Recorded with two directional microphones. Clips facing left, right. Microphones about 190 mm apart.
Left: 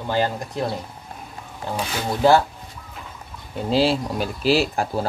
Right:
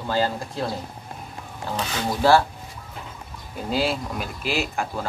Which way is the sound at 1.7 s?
15° left (ahead or behind).